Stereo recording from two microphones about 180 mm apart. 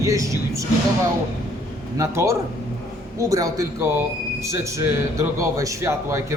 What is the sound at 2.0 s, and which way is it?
A man's voice, 15° right (ahead or behind).